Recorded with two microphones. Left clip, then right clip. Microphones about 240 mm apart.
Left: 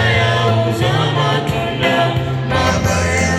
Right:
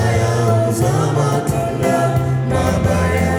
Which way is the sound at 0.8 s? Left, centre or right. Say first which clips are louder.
Left 2 dB; right.